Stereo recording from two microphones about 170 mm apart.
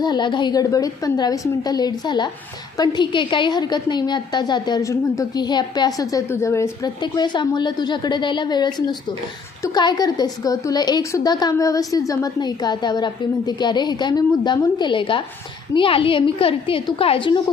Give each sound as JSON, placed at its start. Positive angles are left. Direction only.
{"t": 0.0, "sound": "a woman's voice", "side_deg": 25}